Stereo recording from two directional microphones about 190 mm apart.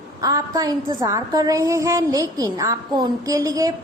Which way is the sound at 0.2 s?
20° right (ahead or behind).